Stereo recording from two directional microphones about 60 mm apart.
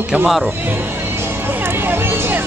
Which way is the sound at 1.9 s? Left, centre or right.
Right.